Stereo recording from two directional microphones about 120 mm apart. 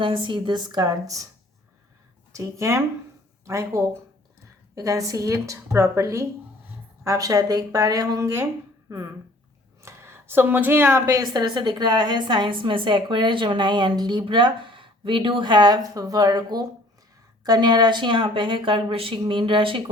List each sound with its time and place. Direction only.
0.0 s a woman's voice: 45° right (ahead or behind)
2.3 s a woman's voice: 25° right (ahead or behind)
9.8 s a woman's voice: 20° right (ahead or behind); by 19.8 s 45° right (ahead or behind)